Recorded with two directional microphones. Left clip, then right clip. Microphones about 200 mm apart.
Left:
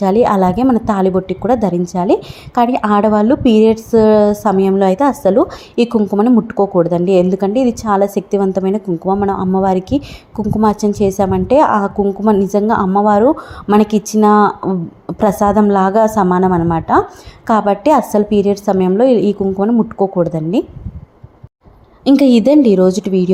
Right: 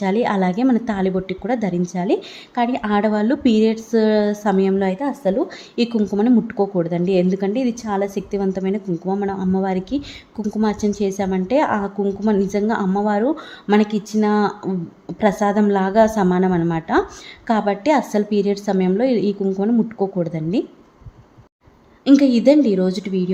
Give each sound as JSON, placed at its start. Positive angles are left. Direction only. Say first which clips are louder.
{"t": 0.0, "sound": "a woman's voice", "louder": "left 8 dB", "side_deg": 10}
{"t": 22.1, "sound": "a woman's voice", "louder": "left 4 dB", "side_deg": 25}